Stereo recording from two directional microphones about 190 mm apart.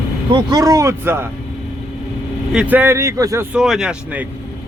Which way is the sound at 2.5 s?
5° right (ahead or behind).